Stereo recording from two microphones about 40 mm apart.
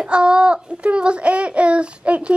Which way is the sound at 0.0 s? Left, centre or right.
Right.